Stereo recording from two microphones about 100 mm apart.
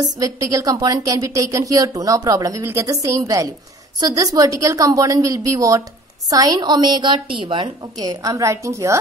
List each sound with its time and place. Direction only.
0.2 s a woman's voice: 35° right (ahead or behind); by 7.7 s 60° right (ahead or behind)
7.8 s a woman's voice: 35° right (ahead or behind)